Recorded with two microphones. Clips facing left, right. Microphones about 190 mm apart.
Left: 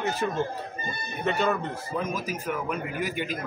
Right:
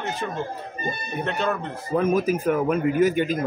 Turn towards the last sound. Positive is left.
turn(degrees=-45)  # may be behind; listen again after turning